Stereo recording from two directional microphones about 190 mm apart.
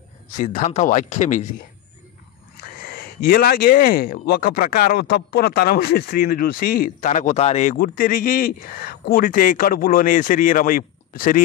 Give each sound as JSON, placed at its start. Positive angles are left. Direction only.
{"t": 0.4, "sound": "speech", "side_deg": 40}
{"t": 2.9, "sound": "speech", "side_deg": 50}